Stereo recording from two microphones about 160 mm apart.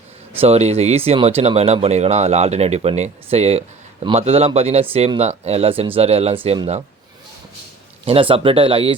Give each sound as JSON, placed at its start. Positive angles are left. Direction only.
{"t": 0.3, "sound": "speech", "side_deg": -40}
{"t": 8.0, "sound": "speech", "side_deg": -35}